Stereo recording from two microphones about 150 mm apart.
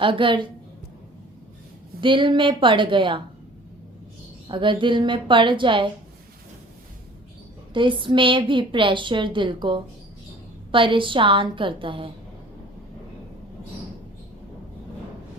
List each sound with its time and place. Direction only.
0.0 s a woman's voice: 35° right (ahead or behind)
2.0 s a woman's voice: 35° right (ahead or behind)
4.4 s a woman's voice: 35° right (ahead or behind)
7.7 s a woman's voice: 35° right (ahead or behind)